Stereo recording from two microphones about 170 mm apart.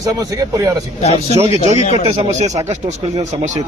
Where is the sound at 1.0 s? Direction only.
35° left (ahead or behind).